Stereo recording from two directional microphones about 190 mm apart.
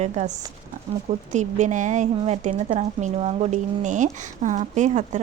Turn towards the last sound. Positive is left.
turn(degrees=-40)  # may be behind; listen again after turning